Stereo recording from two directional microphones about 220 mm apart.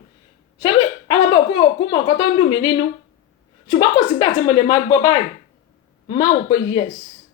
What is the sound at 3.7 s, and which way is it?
A woman's voice, 20° left (ahead or behind).